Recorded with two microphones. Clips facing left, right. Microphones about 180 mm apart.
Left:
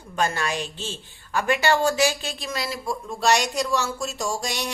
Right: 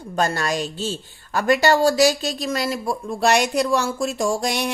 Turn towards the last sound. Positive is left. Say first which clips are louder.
# right 6 dB
turn(degrees=-55)  # may be behind; listen again after turning